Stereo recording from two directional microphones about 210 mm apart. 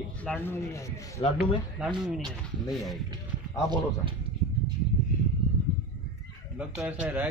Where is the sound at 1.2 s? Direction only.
25° left (ahead or behind).